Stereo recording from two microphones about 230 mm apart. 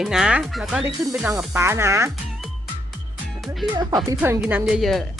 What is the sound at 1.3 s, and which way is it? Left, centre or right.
Speech, centre.